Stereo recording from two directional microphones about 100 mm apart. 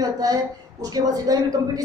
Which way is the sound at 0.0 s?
40° right (ahead or behind).